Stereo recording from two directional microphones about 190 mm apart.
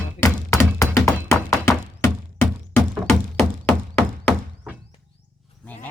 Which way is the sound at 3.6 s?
Centre (ahead or behind).